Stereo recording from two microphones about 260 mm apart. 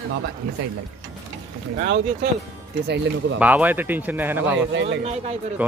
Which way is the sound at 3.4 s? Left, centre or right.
Centre.